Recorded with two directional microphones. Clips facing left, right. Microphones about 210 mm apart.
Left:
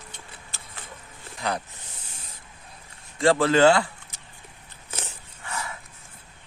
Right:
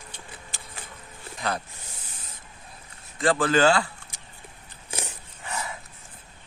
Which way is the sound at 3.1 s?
25° left (ahead or behind).